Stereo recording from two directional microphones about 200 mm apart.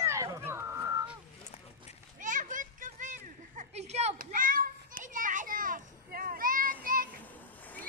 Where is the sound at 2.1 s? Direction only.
40° right (ahead or behind).